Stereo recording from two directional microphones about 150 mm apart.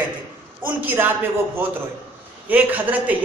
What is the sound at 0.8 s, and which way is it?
Speech, 10° right (ahead or behind).